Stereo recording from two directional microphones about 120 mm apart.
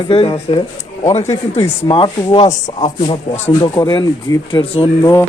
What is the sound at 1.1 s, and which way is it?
Speech, 60° left (ahead or behind).